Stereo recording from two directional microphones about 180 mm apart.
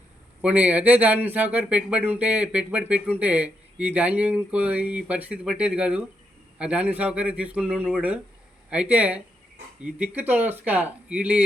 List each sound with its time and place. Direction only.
0.4 s speech: 5° right (ahead or behind)